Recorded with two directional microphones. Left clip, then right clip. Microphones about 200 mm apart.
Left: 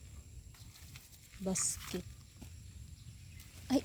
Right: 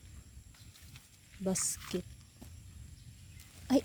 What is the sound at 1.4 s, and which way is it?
Speech, 40° right (ahead or behind).